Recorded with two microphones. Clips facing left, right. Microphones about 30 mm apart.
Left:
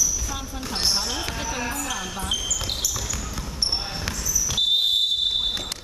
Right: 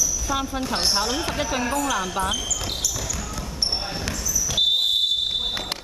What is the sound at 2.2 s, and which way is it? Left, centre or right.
Basketball bounce, centre.